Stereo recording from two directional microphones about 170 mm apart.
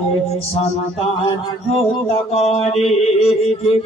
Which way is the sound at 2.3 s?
35° left (ahead or behind).